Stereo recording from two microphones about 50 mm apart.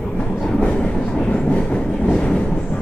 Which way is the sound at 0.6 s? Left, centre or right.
Centre.